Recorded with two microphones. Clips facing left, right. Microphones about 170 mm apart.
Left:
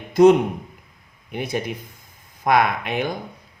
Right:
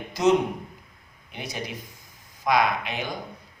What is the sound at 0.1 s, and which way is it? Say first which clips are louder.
A man's voice: left 8 dB; 55° left (ahead or behind).